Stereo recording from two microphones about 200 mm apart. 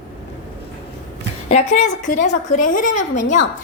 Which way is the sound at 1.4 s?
35° left (ahead or behind).